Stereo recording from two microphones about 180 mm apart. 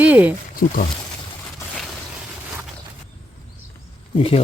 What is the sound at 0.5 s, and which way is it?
Speech, 50° left (ahead or behind).